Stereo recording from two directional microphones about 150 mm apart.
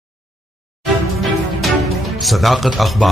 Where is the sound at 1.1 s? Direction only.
Centre (ahead or behind).